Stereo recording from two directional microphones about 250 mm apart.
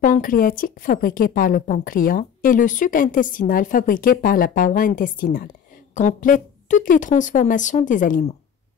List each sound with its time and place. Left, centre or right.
0.0 s a woman's voice: left